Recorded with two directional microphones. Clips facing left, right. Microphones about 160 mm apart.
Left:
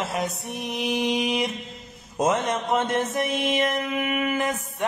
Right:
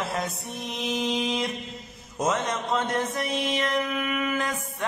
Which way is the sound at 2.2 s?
25° left (ahead or behind).